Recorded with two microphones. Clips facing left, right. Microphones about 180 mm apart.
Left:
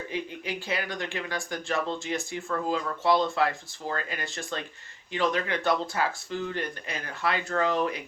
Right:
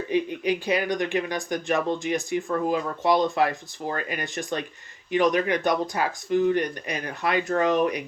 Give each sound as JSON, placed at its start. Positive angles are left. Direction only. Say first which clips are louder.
{"t": 0.1, "sound": "speech", "louder": "right 13 dB", "side_deg": -20}